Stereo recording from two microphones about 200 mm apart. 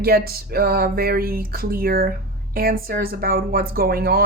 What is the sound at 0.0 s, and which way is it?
Speech, 50° right (ahead or behind).